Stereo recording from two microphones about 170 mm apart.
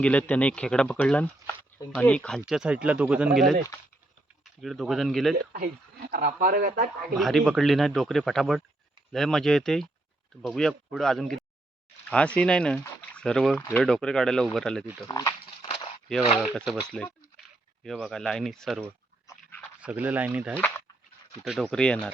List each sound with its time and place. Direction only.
0.0 s speech: 10° left (ahead or behind)
4.6 s speech: centre (ahead or behind)
5.5 s speech: 65° right (ahead or behind)
7.2 s speech: centre (ahead or behind)
15.0 s speech: 20° left (ahead or behind)
15.6 s a sound: 35° left (ahead or behind)
16.3 s speech: centre (ahead or behind)
19.3 s dog: 10° left (ahead or behind)
19.8 s speech: 10° right (ahead or behind)
20.6 s speech: 10° left (ahead or behind)
21.4 s speech: centre (ahead or behind)